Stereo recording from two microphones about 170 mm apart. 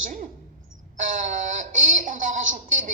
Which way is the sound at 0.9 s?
50° right (ahead or behind).